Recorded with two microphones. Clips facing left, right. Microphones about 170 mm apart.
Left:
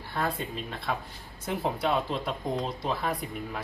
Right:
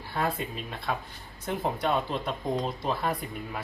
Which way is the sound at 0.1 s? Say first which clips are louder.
Right 1 dB; 5° right (ahead or behind).